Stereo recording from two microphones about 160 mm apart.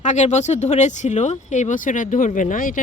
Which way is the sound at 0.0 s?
50° left (ahead or behind).